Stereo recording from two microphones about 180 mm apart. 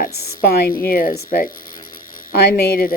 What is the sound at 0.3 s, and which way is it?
A woman's voice, 55° left (ahead or behind).